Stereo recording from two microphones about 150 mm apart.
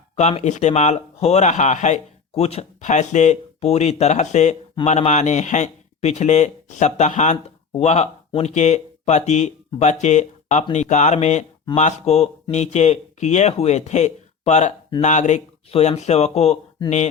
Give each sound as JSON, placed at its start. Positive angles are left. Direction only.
{"t": 0.2, "sound": "speech", "side_deg": 45}